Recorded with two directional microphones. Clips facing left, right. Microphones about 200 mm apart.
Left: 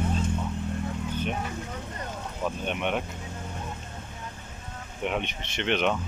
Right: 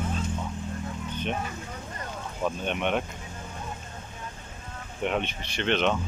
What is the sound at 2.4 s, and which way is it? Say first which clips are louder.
Speech: right 1 dB; 5° left (ahead or behind).